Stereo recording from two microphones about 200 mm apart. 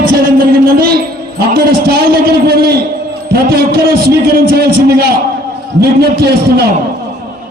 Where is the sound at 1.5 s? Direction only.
50° right (ahead or behind).